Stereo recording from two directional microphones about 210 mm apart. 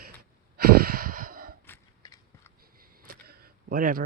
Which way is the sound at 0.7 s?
45° right (ahead or behind).